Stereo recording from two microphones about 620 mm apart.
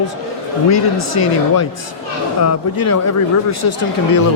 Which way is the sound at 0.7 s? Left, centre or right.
Left.